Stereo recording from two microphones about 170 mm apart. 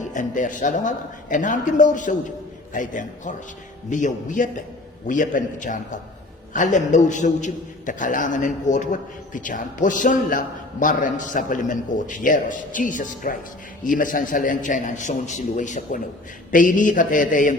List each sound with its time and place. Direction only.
0.1 s a man's voice: 50° left (ahead or behind)